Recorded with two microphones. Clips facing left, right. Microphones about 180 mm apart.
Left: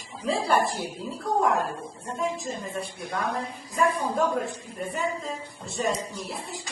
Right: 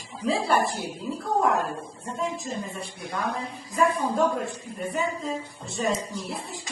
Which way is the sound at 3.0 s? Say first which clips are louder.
Right 1 dB; 55° left (ahead or behind).